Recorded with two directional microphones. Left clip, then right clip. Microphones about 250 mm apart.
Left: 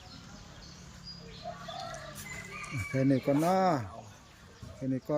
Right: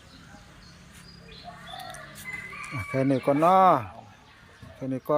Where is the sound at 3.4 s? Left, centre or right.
Right.